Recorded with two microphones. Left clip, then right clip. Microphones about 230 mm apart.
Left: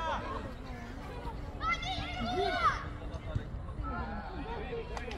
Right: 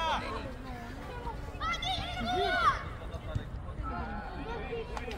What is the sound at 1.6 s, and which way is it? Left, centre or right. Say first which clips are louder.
Children playing: right 1 dB; right.